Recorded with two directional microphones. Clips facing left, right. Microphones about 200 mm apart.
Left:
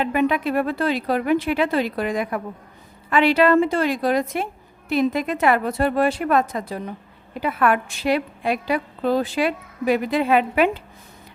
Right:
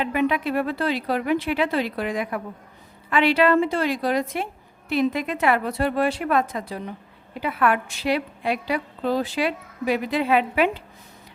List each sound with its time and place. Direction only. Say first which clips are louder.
0.0 s a woman's voice: left 2 dB; 45° left (ahead or behind)